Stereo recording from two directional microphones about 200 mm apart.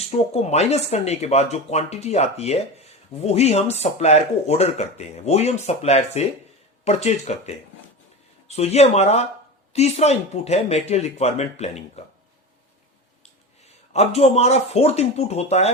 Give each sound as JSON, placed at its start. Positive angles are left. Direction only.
{"t": 0.4, "sound": "speech", "side_deg": 35}
{"t": 13.9, "sound": "speech", "side_deg": 30}